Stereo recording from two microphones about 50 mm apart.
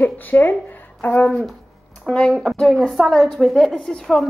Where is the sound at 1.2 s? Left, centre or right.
Left.